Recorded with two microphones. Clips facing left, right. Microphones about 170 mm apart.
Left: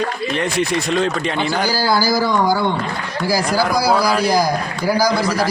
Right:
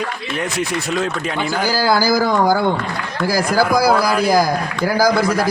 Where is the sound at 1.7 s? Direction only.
50° right (ahead or behind).